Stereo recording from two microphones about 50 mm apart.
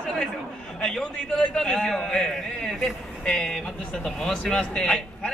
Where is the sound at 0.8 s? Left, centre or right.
Centre.